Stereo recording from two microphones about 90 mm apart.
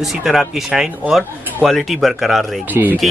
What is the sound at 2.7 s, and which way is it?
Speech, 20° right (ahead or behind).